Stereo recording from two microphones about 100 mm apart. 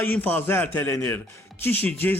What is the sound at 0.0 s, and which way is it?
Speech, 20° left (ahead or behind).